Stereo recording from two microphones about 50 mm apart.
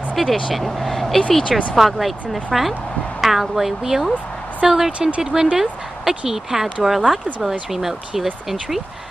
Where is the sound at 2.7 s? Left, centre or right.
Left.